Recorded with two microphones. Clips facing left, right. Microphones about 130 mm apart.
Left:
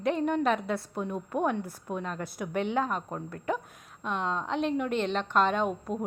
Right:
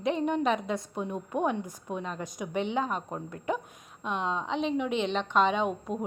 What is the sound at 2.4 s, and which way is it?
Speech, 10° right (ahead or behind).